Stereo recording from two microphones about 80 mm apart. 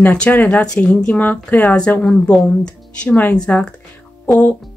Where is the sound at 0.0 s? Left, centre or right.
Centre.